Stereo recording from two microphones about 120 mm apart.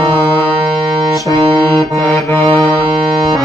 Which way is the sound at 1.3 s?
30° right (ahead or behind).